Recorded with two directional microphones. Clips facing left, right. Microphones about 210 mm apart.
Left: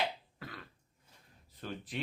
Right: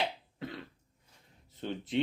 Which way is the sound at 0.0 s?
25° right (ahead or behind).